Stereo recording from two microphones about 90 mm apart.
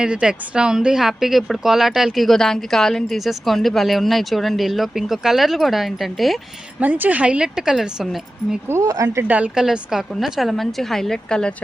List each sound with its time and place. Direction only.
0.0 s speech: 10° right (ahead or behind)
6.7 s a woman's voice: 20° right (ahead or behind); by 8.5 s 5° right (ahead or behind)
8.6 s speech: 30° right (ahead or behind)
9.2 s a woman's voice: 15° right (ahead or behind)
9.6 s speech: 5° right (ahead or behind)